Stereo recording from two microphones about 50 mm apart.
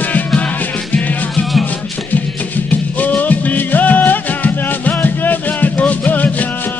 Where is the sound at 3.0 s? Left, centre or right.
Left.